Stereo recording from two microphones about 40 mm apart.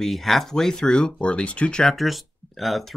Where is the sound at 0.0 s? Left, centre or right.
Centre; by 1.8 s left.